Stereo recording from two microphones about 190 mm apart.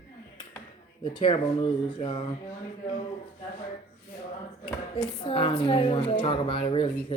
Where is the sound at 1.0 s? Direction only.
25° left (ahead or behind).